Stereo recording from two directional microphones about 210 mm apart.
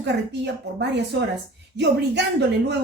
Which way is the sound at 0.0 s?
55° right (ahead or behind).